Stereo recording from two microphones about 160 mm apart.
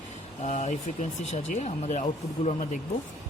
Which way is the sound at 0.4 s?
45° left (ahead or behind).